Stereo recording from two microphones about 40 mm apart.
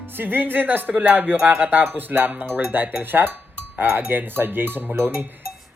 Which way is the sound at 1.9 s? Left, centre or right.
Right.